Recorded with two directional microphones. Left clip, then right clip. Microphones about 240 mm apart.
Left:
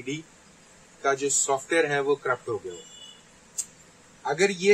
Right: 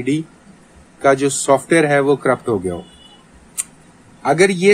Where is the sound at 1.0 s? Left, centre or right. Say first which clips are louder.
Right 11 dB; right.